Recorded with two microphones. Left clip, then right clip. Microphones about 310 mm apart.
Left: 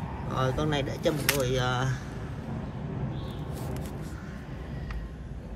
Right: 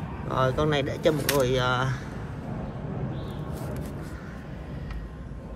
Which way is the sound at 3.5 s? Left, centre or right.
Centre.